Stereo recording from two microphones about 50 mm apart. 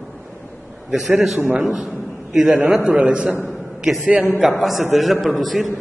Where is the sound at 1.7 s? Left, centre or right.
Centre.